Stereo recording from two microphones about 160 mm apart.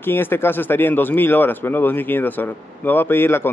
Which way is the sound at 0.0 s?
15° left (ahead or behind).